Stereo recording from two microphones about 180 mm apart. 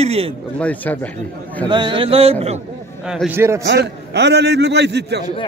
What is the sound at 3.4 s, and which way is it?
Speech, 15° right (ahead or behind).